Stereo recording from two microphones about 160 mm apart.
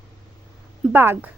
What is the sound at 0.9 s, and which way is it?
Speech, 15° right (ahead or behind).